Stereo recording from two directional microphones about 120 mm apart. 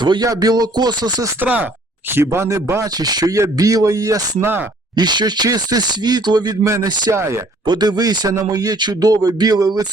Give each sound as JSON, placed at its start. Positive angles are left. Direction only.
{"t": 0.0, "sound": "speech", "side_deg": -40}
{"t": 1.4, "sound": "speech", "side_deg": -10}
{"t": 3.0, "sound": "speech", "side_deg": -35}
{"t": 7.7, "sound": "speech", "side_deg": -35}